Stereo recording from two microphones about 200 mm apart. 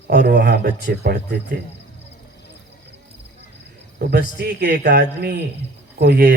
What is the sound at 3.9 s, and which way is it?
Speech, 55° right (ahead or behind).